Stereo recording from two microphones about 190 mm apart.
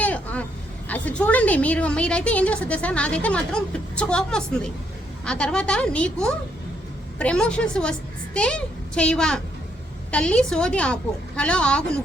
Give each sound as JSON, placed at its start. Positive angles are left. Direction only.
{"t": 0.0, "sound": "vehicle", "side_deg": 5}
{"t": 0.9, "sound": "a woman's voice", "side_deg": 5}